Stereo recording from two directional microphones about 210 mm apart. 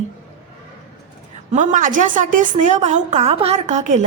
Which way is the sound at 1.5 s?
35° right (ahead or behind).